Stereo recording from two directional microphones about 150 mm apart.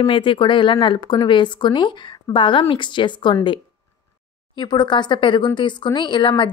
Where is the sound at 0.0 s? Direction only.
35° left (ahead or behind).